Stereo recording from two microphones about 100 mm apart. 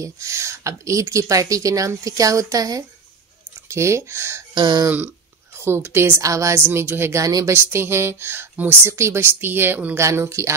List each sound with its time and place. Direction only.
0.0 s speech: 30° right (ahead or behind)
4.6 s speech: 45° right (ahead or behind)
4.8 s speech: 20° right (ahead or behind); by 7.5 s 35° right (ahead or behind)
7.5 s speech: 25° right (ahead or behind)